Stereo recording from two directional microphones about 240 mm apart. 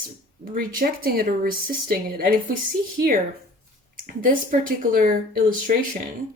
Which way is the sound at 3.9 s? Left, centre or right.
Right.